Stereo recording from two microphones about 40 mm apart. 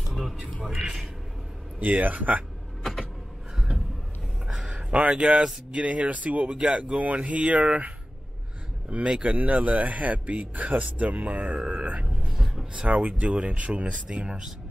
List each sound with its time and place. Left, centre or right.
0.1 s a sound: centre
1.8 s speech: right
2.8 s vehicle: centre
3.5 s a sound: centre
4.5 s a sound: centre
5.1 s speech: right
9.2 s speech: right
12.3 s vehicle: centre
12.8 s speech: right